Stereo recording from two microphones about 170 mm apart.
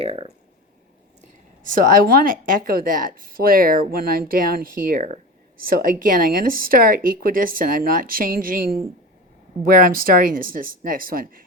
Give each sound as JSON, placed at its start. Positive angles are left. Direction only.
{"t": 0.0, "sound": "speech", "side_deg": -35}
{"t": 1.2, "sound": "a woman's voice", "side_deg": -50}